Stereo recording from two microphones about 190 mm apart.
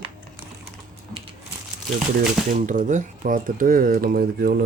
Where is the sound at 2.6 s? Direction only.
40° right (ahead or behind).